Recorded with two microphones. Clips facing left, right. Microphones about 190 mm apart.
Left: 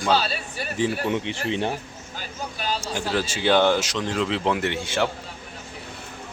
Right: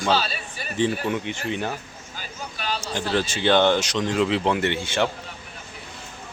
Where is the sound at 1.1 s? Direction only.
30° left (ahead or behind).